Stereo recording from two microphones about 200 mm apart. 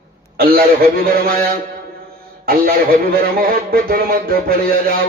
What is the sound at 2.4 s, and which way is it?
Speech, 50° right (ahead or behind).